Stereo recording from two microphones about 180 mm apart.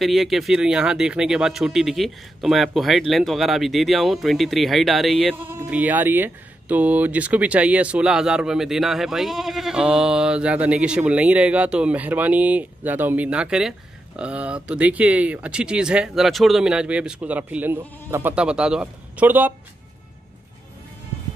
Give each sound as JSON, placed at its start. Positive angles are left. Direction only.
{"t": 0.0, "sound": "speech", "side_deg": 0}
{"t": 5.3, "sound": "speech", "side_deg": -10}